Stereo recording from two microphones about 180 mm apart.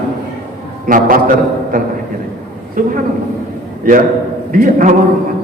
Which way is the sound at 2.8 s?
50° right (ahead or behind).